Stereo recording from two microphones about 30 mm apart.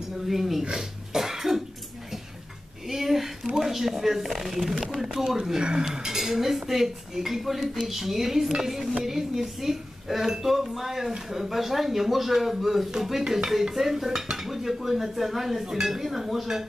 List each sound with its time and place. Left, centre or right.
0.3 s a man's voice: centre
0.7 s cough: centre
2.9 s a sound: centre
3.5 s a man's voice: centre
5.6 s speech: right
5.9 s a man's voice: centre
13.2 s a man's voice: centre